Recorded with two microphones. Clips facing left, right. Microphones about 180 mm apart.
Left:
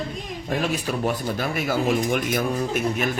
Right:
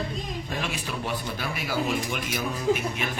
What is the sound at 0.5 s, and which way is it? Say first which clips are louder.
Speech: left 9 dB; 40° left (ahead or behind).